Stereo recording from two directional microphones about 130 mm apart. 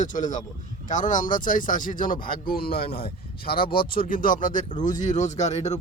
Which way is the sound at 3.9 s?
90° left.